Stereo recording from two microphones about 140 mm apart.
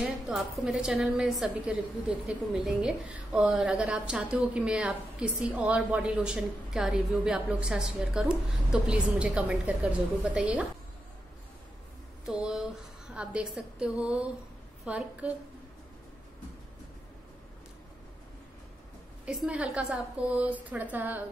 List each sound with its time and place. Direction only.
0.0 s a woman's voice: 5° right (ahead or behind)
12.3 s a woman's voice: 5° right (ahead or behind)
19.2 s a woman's voice: 10° right (ahead or behind)